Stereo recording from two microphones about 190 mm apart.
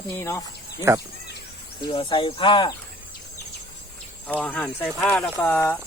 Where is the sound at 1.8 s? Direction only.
25° left (ahead or behind).